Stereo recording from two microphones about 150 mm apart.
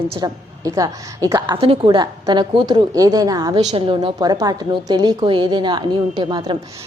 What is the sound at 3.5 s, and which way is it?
A woman's voice, 35° right (ahead or behind).